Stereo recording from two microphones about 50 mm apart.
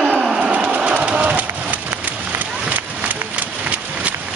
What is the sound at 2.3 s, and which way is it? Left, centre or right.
Run, right.